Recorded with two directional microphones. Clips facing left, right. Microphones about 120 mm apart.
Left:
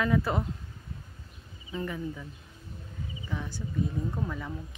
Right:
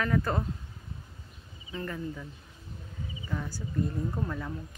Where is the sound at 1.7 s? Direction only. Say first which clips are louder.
Left 2 dB; 10° left (ahead or behind).